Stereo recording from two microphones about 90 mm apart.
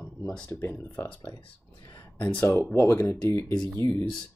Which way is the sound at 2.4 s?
25° left (ahead or behind).